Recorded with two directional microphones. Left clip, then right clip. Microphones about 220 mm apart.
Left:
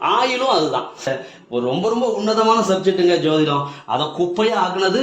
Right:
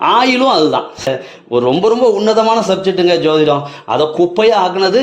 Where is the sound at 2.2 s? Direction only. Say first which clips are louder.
Right 5 dB; 35° right (ahead or behind).